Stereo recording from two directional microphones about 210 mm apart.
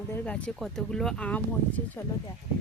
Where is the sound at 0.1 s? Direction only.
10° left (ahead or behind).